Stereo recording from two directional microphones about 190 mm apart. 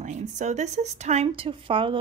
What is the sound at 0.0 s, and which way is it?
Speech, 40° right (ahead or behind).